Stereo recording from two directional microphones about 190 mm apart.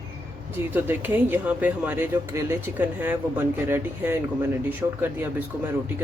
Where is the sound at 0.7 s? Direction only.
10° right (ahead or behind).